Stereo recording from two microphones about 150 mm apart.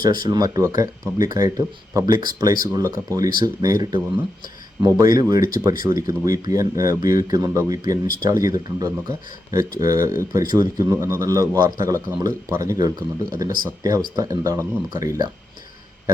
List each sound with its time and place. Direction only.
0.0 s a man's voice: 30° right (ahead or behind)